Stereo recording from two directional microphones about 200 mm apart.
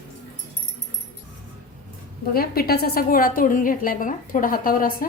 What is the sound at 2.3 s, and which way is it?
A woman's voice, 50° left (ahead or behind).